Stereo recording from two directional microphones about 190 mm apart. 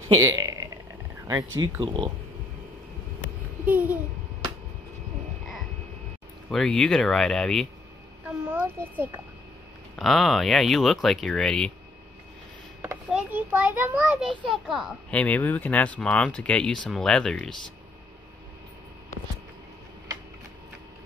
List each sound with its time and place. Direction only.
0.1 s burping: 15° right (ahead or behind)
1.8 s speech: 25° right (ahead or behind)
3.7 s babbling: 10° right (ahead or behind)
6.5 s a child's voice: 5° left (ahead or behind)
8.3 s a sound: 10° right (ahead or behind)
9.9 s a child's voice: centre (ahead or behind)
13.1 s a child's voice: 10° right (ahead or behind)